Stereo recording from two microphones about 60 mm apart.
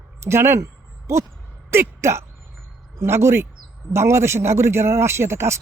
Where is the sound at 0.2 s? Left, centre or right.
Right.